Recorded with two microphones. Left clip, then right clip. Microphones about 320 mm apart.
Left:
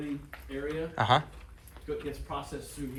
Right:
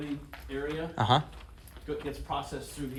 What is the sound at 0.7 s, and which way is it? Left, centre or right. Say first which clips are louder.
Speech: left 1 dB; centre.